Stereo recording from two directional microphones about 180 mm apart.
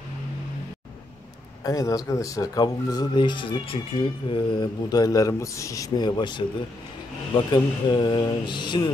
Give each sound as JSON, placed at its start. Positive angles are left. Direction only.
{"t": 1.6, "sound": "speech", "side_deg": 20}
{"t": 7.5, "sound": "speech", "side_deg": 25}